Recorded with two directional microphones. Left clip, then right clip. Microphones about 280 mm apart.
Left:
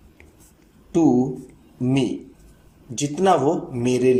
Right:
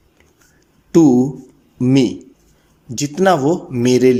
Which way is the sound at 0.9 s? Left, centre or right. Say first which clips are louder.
Right 7 dB; right.